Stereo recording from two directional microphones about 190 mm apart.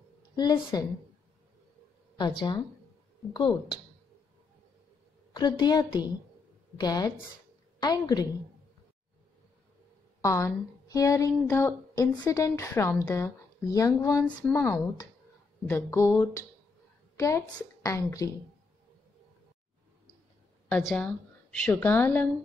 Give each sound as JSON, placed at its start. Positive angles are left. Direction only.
{"t": 0.4, "sound": "a woman's voice", "side_deg": 20}
{"t": 2.1, "sound": "a woman's voice", "side_deg": 25}
{"t": 5.3, "sound": "a woman's voice", "side_deg": 20}
{"t": 10.2, "sound": "a woman's voice", "side_deg": 15}
{"t": 20.6, "sound": "a woman's voice", "side_deg": 5}